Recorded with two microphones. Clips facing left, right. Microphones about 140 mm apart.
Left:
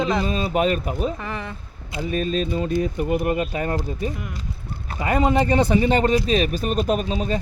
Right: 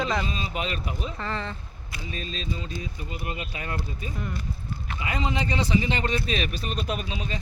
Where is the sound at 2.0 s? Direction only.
50° left (ahead or behind).